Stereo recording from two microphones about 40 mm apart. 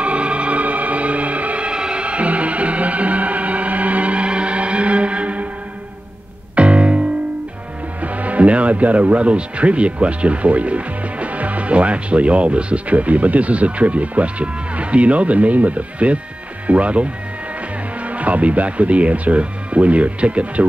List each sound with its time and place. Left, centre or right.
0.0 s music: right
1.7 s music: right
6.5 s music: right
8.0 s speech: right